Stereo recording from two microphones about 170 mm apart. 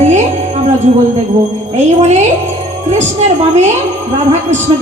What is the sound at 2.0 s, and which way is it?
Music, 40° right (ahead or behind).